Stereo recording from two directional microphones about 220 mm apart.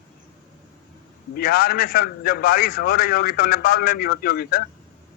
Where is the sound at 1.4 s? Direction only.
40° left (ahead or behind).